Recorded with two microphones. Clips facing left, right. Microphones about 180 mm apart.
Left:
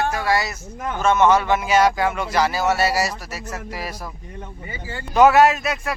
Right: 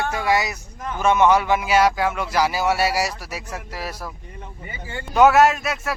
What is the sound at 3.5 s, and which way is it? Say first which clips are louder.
Speech: left 3 dB; centre (ahead or behind).